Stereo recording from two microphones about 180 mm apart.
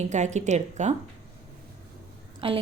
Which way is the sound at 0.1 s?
40° right (ahead or behind).